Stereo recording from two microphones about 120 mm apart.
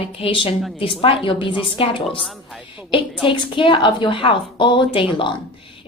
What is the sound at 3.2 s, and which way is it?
A woman's voice, 45° left (ahead or behind).